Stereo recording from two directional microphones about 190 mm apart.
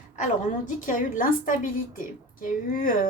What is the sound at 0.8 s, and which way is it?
A woman's voice, 45° left (ahead or behind).